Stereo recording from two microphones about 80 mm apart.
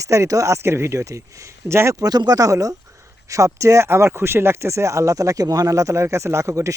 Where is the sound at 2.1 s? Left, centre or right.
Right.